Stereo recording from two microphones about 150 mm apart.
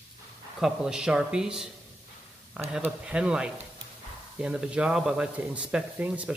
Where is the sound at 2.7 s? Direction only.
5° right (ahead or behind).